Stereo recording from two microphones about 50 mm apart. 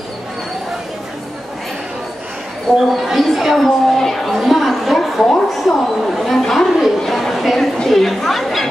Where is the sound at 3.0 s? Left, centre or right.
Centre.